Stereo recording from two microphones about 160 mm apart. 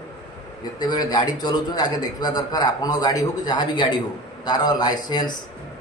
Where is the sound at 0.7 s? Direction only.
25° left (ahead or behind).